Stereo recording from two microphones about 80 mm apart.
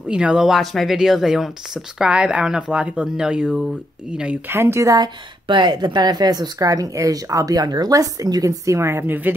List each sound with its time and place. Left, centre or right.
0.1 s speech: centre
4.5 s speech: right
4.9 s a woman's voice: right
9.0 s speech: right